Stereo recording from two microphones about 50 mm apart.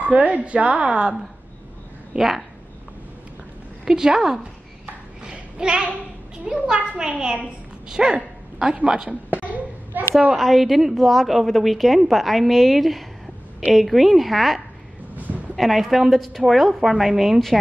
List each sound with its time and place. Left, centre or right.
0.0 s a woman's voice: right
2.1 s speech: centre
3.8 s a child's voice: centre
5.2 s a sound: centre
6.4 s a child's voice: centre
7.9 s dog: centre
8.8 s a child's voice: centre
9.9 s a woman's voice: right
10.3 s a woman's voice: centre
15.1 s a sound: right
15.5 s a woman's voice: centre